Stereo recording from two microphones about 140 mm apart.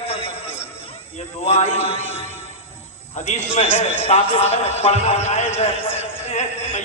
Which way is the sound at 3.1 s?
55° left (ahead or behind).